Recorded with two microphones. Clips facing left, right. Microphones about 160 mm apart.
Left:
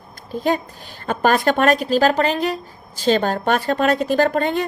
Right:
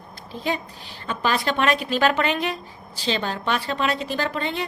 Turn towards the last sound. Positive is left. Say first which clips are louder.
# left 8 dB
turn(degrees=50)  # may be behind; listen again after turning